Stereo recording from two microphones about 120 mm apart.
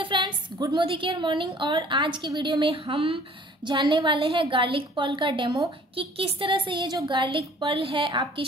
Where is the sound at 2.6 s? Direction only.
50° right (ahead or behind).